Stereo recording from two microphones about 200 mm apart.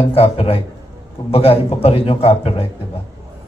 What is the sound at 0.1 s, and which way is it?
A man's voice, 30° left (ahead or behind).